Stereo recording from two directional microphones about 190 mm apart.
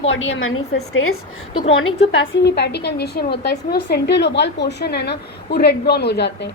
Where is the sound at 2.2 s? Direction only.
75° left (ahead or behind).